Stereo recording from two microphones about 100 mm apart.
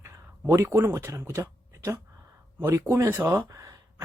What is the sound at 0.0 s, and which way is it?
Speech, 30° right (ahead or behind).